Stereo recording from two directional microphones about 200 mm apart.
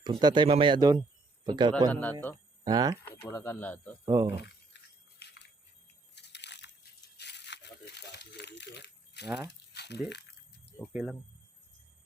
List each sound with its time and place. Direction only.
0.0 s speech: 20° right (ahead or behind)
1.9 s speech: 10° left (ahead or behind)
2.6 s speech: 20° right (ahead or behind)
3.0 s speech: 10° left (ahead or behind)
4.0 s speech: 20° right (ahead or behind)
4.7 s keys jangling: 60° left (ahead or behind)
5.2 s a sound: 55° left (ahead or behind)
7.2 s crumpling: 60° left (ahead or behind)
9.7 s a sound: 55° left (ahead or behind)
10.9 s speech: centre (ahead or behind)